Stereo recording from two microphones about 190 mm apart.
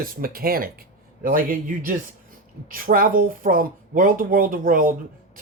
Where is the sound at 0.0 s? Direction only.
50° right (ahead or behind).